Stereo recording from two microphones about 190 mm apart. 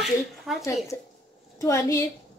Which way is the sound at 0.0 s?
Centre (ahead or behind).